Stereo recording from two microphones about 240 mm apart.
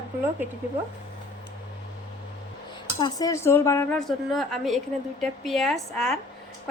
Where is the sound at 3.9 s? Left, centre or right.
Centre.